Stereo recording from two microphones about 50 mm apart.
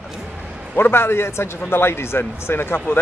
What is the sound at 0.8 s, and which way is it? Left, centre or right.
A man's voice, left.